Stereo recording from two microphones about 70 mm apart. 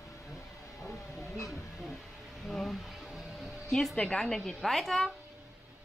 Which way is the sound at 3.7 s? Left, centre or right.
Centre.